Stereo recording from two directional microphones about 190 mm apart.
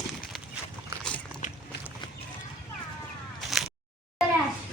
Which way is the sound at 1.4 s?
40° left (ahead or behind).